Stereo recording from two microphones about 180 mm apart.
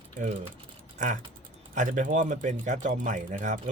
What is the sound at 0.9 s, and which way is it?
Speech, 45° right (ahead or behind).